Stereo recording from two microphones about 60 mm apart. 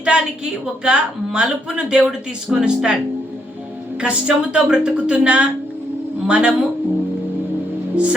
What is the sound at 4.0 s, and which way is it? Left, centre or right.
A woman's voice, centre.